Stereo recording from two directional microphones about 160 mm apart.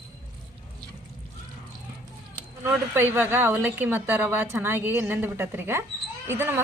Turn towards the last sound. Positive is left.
turn(degrees=-15)  # may be behind; listen again after turning